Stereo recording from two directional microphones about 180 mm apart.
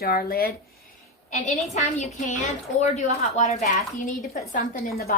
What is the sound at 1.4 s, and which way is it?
A woman's voice, 40° left (ahead or behind).